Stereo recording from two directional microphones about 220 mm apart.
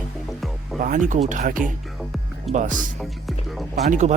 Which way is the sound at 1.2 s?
35° right (ahead or behind).